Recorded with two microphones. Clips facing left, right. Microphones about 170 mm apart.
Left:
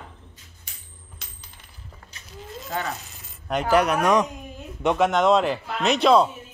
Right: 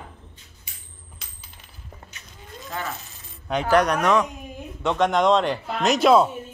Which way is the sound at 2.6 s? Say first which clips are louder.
Left 2 dB; 20° left (ahead or behind).